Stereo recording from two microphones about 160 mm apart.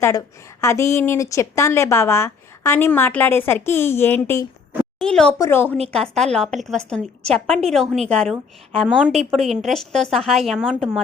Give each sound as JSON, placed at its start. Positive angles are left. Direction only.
{"t": 0.0, "sound": "a woman's voice", "side_deg": 20}
{"t": 4.9, "sound": "a woman's voice", "side_deg": 5}
{"t": 5.9, "sound": "a woman's voice", "side_deg": 0}